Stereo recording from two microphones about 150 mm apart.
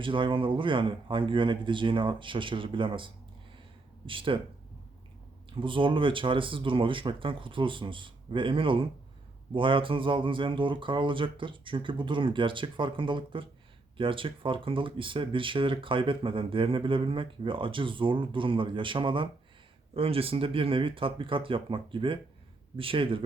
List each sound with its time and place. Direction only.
0.0 s speech: 35° right (ahead or behind)
5.5 s speech: 35° right (ahead or behind)